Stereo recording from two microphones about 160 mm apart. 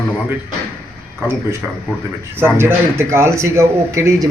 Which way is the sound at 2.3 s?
15° right (ahead or behind).